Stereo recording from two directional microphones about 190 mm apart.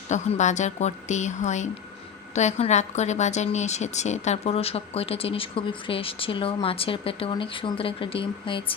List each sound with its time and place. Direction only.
0.1 s a woman's voice: 40° left (ahead or behind)